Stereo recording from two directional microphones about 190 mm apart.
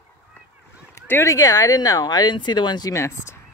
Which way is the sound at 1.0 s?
15° left (ahead or behind).